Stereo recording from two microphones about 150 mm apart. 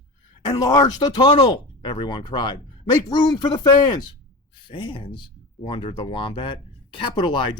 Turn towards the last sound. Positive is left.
turn(degrees=30)  # may be behind; listen again after turning